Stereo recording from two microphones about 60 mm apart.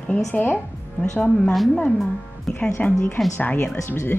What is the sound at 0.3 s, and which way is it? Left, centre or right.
Speech, left.